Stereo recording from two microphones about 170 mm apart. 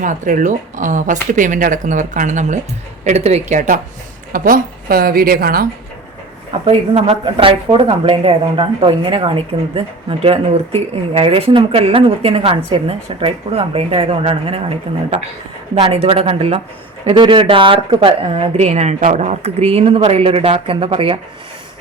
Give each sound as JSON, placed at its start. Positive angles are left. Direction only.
{"t": 0.0, "sound": "a woman's voice", "side_deg": -50}
{"t": 6.5, "sound": "speech", "side_deg": -35}
{"t": 15.7, "sound": "speech", "side_deg": -35}